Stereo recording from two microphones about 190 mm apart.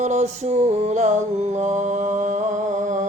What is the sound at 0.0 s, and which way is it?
Music, 35° right (ahead or behind).